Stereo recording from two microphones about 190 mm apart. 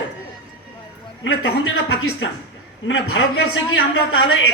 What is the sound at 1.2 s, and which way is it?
A man's voice, 90° left.